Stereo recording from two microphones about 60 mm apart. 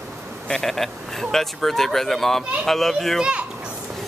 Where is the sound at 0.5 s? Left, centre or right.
Centre.